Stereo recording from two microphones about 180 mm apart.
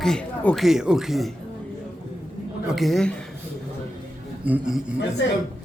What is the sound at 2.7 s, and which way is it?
Speech, centre (ahead or behind).